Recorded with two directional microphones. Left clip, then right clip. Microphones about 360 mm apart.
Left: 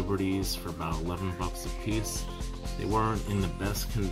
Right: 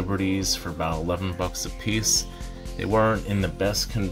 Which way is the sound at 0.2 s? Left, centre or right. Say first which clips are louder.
Right 6 dB; centre.